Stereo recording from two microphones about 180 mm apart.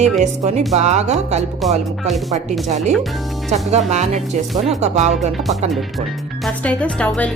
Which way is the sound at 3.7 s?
40° right (ahead or behind).